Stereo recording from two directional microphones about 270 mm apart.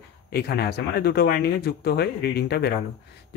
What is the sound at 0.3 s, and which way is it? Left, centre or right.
Speech, left.